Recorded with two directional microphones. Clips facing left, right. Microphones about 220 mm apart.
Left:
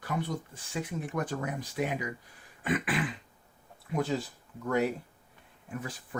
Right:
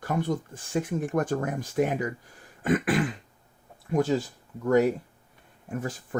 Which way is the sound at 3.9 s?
45° right (ahead or behind).